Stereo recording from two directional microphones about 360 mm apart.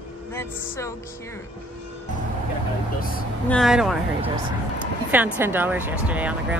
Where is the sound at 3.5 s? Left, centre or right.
Centre.